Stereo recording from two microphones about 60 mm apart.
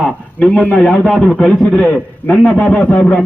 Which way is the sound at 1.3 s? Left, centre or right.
Centre.